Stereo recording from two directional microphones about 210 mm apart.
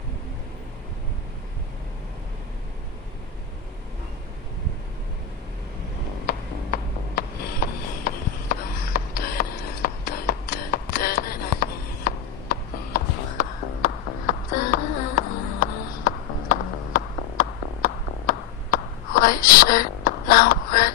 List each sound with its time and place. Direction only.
6.2 s music: 45° left (ahead or behind)